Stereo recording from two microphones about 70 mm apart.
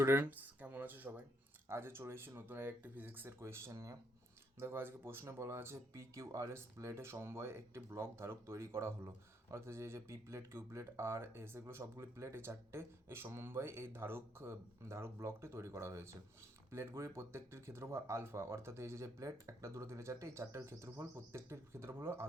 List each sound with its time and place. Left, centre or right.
0.0 s speech: right
1.6 s speech: right
3.4 s speech: right
4.6 s speech: right